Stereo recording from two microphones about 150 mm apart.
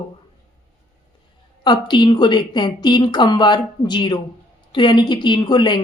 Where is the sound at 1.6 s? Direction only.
30° left (ahead or behind).